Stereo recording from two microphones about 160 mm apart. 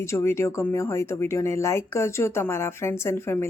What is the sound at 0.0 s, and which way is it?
Speech, 15° left (ahead or behind).